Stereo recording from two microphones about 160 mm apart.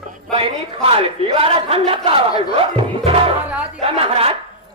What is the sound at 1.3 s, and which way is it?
Speech, 35° right (ahead or behind).